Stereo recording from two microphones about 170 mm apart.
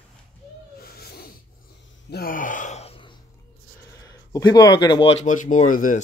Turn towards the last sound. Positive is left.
turn(degrees=50)  # may be behind; listen again after turning